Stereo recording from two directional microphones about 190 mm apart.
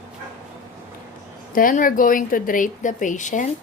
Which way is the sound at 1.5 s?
45° left (ahead or behind).